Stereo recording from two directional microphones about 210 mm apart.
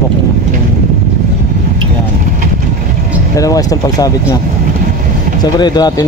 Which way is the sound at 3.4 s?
15° left (ahead or behind).